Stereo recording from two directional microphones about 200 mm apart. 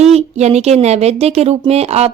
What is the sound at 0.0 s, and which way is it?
Speech, 30° right (ahead or behind).